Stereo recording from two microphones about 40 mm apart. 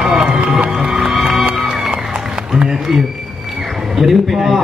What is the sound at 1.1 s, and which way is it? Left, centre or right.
Music, centre.